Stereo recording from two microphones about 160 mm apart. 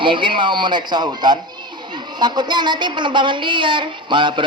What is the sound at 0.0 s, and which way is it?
A woman's voice, 30° right (ahead or behind).